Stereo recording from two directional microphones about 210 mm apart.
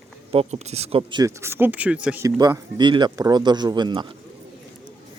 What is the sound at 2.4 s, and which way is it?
Speech, 20° right (ahead or behind).